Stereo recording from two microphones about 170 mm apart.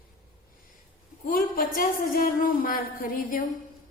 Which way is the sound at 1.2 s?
55° left (ahead or behind).